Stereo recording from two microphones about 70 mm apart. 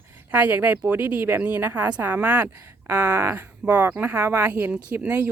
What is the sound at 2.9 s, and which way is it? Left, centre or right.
Speech, right.